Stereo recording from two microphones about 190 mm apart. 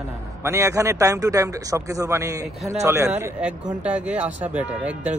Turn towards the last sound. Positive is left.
turn(degrees=-5)  # may be behind; listen again after turning